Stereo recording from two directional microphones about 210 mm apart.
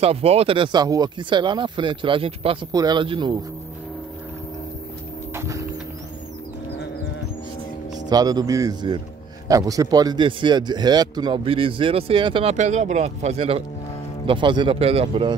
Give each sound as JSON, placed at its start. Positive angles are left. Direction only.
{"t": 0.0, "sound": "a man's voice", "side_deg": -30}
{"t": 5.3, "sound": "music", "side_deg": -15}
{"t": 8.1, "sound": "a man's voice", "side_deg": -20}